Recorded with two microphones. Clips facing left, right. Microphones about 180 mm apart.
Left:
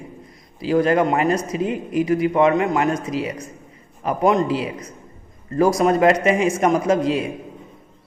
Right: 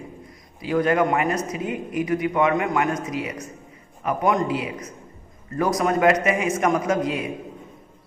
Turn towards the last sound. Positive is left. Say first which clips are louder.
# left 4 dB
turn(degrees=30)  # may be behind; listen again after turning